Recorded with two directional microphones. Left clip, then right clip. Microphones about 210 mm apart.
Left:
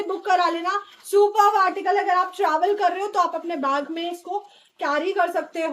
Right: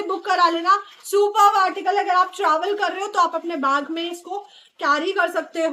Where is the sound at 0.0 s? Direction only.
15° right (ahead or behind).